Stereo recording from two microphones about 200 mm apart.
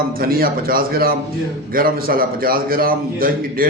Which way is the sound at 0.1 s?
45° right (ahead or behind).